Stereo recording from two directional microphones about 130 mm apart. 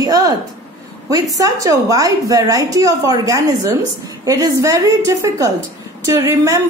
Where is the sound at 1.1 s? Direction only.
25° right (ahead or behind).